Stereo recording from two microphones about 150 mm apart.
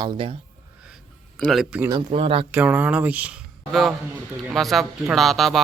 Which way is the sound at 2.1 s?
40° right (ahead or behind).